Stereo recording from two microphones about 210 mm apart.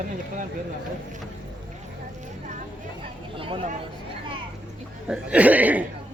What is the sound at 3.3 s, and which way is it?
Speech, 25° right (ahead or behind).